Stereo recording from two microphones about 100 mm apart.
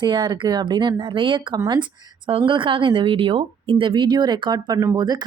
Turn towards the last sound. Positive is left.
turn(degrees=-45)  # may be behind; listen again after turning